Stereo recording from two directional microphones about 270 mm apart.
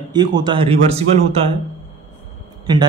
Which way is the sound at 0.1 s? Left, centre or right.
Centre.